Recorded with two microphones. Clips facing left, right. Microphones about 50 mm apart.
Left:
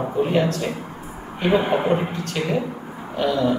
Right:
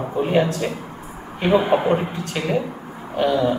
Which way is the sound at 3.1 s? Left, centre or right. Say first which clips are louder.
Right 2 dB; centre.